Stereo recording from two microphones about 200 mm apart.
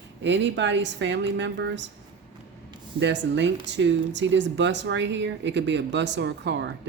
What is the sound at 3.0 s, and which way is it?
Speech, 65° right (ahead or behind).